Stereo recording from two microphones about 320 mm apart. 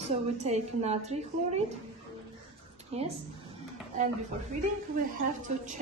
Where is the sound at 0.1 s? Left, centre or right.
Right.